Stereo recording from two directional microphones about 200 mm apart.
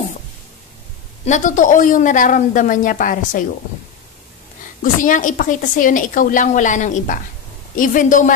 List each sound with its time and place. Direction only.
1.2 s a woman's voice: 40° left (ahead or behind)
5.0 s a woman's voice: 40° left (ahead or behind)